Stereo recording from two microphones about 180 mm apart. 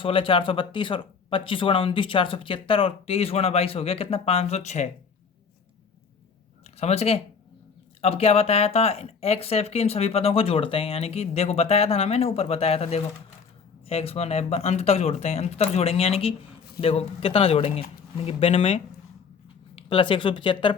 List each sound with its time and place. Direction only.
0.0 s speech: 30° left (ahead or behind)
6.7 s speech: 35° left (ahead or behind)
19.9 s speech: 30° left (ahead or behind)